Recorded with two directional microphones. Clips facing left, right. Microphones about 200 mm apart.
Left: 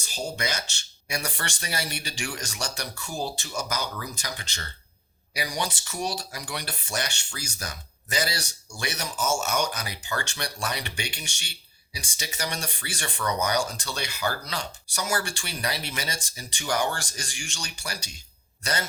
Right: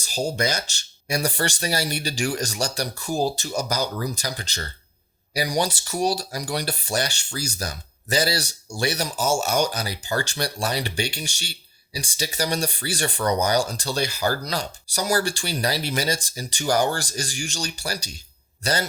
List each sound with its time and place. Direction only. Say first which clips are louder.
0.0 s speech: right 7 dB; 35° right (ahead or behind)